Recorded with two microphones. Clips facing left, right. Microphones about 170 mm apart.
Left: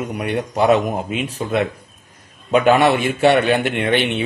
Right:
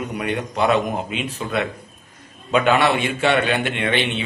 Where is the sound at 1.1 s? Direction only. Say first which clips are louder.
Left 3 dB; 40° left (ahead or behind).